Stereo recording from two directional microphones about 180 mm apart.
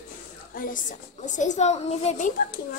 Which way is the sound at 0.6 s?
50° left (ahead or behind).